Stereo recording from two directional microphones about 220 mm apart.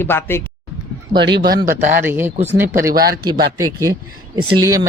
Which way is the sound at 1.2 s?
50° right (ahead or behind).